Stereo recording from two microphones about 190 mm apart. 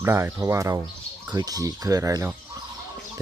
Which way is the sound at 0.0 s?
15° right (ahead or behind).